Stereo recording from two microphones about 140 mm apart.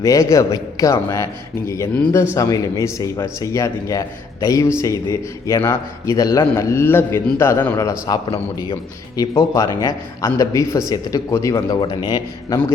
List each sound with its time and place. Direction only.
0.0 s a man's voice: 20° left (ahead or behind)
11.8 s speech: 30° left (ahead or behind)